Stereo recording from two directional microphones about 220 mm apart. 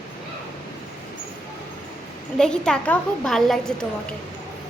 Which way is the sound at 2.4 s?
5° left (ahead or behind).